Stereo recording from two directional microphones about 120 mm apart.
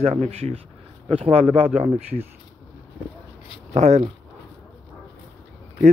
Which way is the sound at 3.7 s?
70° right (ahead or behind).